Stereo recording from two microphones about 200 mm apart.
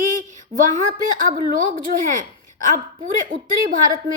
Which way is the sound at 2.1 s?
40° right (ahead or behind).